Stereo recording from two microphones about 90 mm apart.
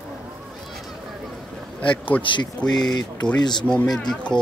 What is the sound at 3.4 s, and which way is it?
Speech, 55° left (ahead or behind).